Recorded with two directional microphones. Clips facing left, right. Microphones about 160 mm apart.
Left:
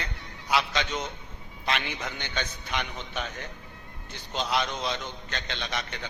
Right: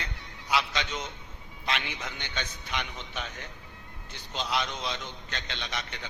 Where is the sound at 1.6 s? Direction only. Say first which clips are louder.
Left 3 dB; 50° left (ahead or behind).